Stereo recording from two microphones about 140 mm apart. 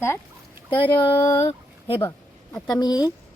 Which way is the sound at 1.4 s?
45° left (ahead or behind).